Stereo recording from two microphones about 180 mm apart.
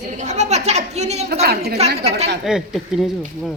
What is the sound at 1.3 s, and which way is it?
Speech, 60° right (ahead or behind).